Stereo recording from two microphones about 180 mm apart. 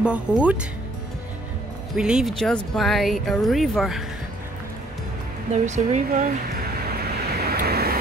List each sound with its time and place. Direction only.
0.0 s speech: 5° right (ahead or behind)
2.0 s speech: 5° right (ahead or behind)
5.5 s a sound: 40° right (ahead or behind); by 8.0 s 60° right (ahead or behind)